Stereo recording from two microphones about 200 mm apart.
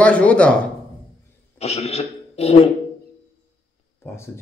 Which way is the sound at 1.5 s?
30° left (ahead or behind).